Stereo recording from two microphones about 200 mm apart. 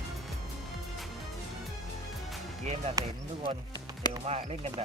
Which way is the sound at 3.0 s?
15° right (ahead or behind).